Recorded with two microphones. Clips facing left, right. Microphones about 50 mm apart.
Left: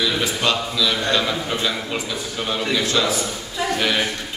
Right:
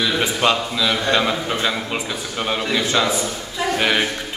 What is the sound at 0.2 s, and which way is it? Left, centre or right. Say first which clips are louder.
A man's voice: right 3 dB; right.